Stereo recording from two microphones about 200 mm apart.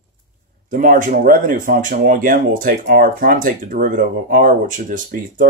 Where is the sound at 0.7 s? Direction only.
40° right (ahead or behind).